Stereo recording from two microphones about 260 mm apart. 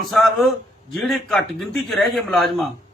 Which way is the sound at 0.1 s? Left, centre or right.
Centre.